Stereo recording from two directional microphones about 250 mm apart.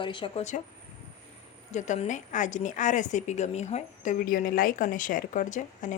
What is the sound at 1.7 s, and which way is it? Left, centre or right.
A woman's voice, left.